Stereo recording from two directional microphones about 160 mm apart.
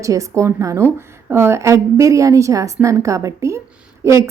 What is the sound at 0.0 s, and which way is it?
A woman's voice, 20° right (ahead or behind).